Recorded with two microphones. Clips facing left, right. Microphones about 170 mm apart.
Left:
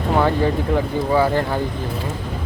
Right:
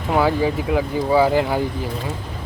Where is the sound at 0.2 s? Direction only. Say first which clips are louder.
Even; 5° right (ahead or behind).